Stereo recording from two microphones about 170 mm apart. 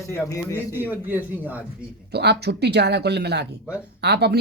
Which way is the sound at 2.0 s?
75° right (ahead or behind).